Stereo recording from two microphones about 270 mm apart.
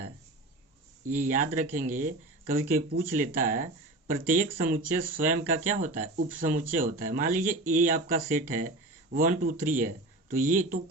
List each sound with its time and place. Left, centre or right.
1.0 s a man's voice: right